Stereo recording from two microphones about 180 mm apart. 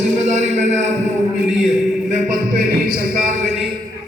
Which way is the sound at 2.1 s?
45° right (ahead or behind).